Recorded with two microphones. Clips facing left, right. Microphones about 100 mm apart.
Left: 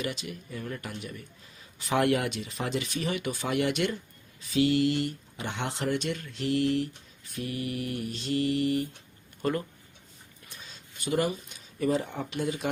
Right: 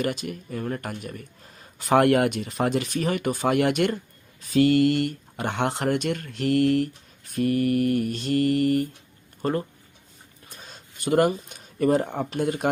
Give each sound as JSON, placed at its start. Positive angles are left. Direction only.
{"t": 0.0, "sound": "speech", "side_deg": -50}
{"t": 9.4, "sound": "speech", "side_deg": -35}
{"t": 10.4, "sound": "speech", "side_deg": -45}